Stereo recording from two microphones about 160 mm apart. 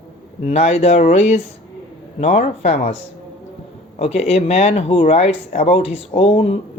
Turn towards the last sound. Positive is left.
turn(degrees=40)  # may be behind; listen again after turning